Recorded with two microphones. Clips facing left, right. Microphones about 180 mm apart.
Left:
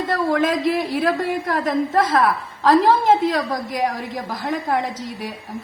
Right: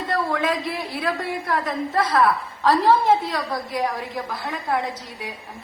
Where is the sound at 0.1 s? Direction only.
45° left (ahead or behind).